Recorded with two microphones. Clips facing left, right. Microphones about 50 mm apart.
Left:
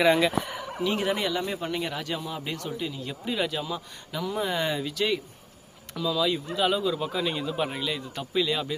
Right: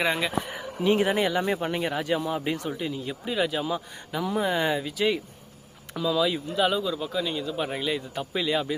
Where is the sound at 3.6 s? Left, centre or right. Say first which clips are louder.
Right 4 dB; right; by 7.5 s centre.